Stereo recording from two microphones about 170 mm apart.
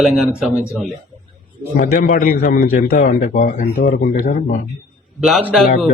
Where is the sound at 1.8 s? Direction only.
50° left (ahead or behind).